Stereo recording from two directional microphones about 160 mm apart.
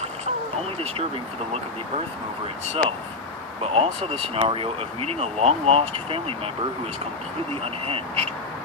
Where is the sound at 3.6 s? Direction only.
40° right (ahead or behind).